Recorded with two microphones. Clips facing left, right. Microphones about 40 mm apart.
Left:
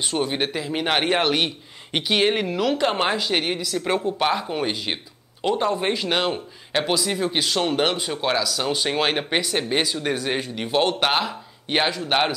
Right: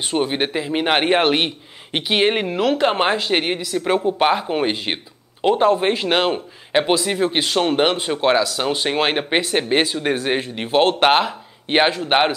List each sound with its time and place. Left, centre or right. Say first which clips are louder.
0.1 s speech: right 5 dB; centre
4.2 s speech: right 5 dB; right